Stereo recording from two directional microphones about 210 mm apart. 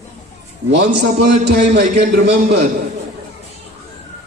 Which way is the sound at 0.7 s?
55° right (ahead or behind).